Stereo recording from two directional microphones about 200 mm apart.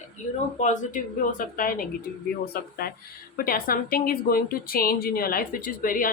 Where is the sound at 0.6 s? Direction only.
40° left (ahead or behind).